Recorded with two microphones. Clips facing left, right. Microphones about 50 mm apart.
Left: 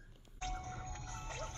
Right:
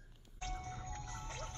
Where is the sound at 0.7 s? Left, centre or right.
Left.